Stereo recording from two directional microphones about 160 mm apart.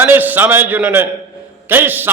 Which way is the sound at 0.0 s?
10° right (ahead or behind).